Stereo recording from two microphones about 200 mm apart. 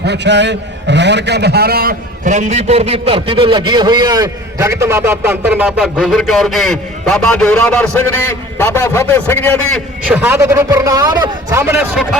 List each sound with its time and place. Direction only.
0.0 s a man's voice: 60° right (ahead or behind); by 9.8 s 10° left (ahead or behind)
10.1 s a man's voice: 10° right (ahead or behind)